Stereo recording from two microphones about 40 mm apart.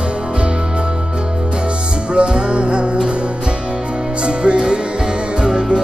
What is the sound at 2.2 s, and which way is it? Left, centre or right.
Music, right.